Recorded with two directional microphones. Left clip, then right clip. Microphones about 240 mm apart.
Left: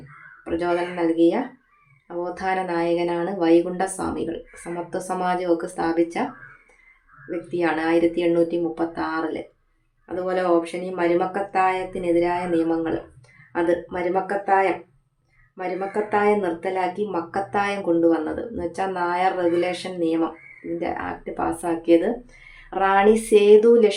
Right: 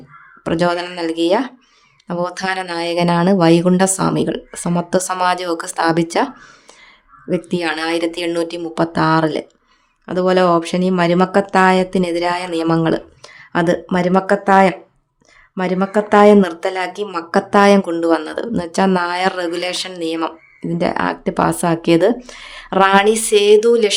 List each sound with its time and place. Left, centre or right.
0.4 s speech: right
7.3 s speech: right